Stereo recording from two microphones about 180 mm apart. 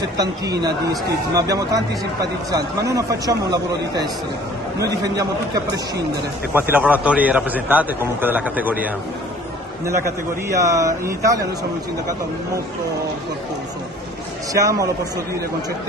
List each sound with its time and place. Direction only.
0.2 s a man's voice: 20° right (ahead or behind)
6.5 s a man's voice: 10° right (ahead or behind)
14.5 s a man's voice: 20° right (ahead or behind)